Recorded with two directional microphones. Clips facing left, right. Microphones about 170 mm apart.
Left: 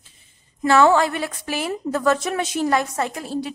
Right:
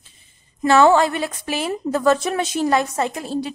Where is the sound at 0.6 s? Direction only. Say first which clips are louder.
Right 2 dB; 25° right (ahead or behind).